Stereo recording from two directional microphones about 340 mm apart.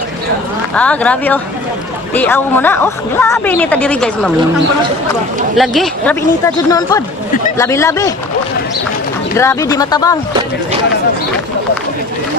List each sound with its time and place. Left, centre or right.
0.7 s a woman's voice: centre
5.5 s a woman's voice: centre
9.4 s speech: centre